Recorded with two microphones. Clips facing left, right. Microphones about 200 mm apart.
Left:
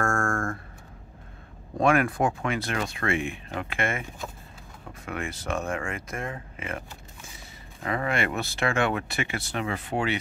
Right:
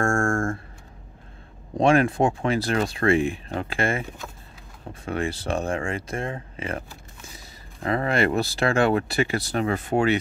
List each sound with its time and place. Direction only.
0.0 s a sound: 25° right (ahead or behind)
1.8 s speech: 30° right (ahead or behind)
5.0 s speech: 30° right (ahead or behind)